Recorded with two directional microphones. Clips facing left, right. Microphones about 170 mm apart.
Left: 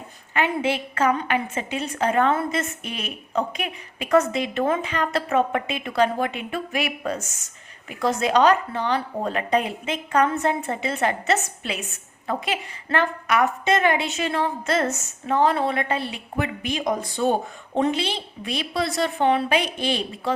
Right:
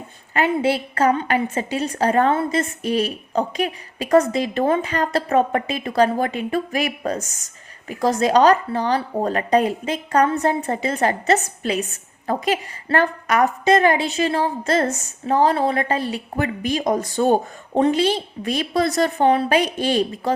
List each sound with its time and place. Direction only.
0.3 s a woman's voice: 35° right (ahead or behind)